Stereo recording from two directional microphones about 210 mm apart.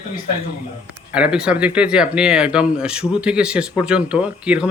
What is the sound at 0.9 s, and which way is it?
Speech, 5° right (ahead or behind).